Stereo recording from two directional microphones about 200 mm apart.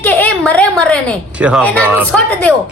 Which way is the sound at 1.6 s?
5° left (ahead or behind).